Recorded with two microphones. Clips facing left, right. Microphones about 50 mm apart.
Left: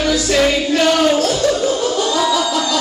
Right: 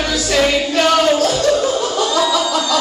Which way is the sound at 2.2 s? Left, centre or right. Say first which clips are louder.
Even; centre.